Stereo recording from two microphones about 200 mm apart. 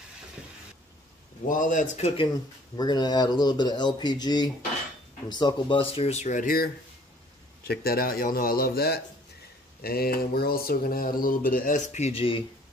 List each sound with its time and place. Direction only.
1.5 s speech: 40° left (ahead or behind)